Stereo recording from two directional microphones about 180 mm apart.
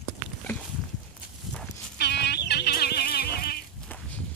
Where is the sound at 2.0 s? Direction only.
65° left (ahead or behind).